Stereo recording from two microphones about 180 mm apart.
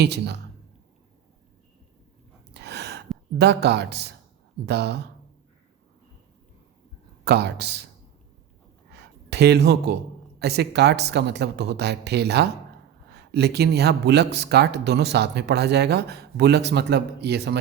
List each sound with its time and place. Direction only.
0.0 s speech: 70° right (ahead or behind)
2.5 s gasp: 65° right (ahead or behind)
3.3 s speech: 65° right (ahead or behind)
7.3 s speech: 65° right (ahead or behind)
8.9 s a sound: 65° right (ahead or behind)
10.4 s speech: 65° right (ahead or behind)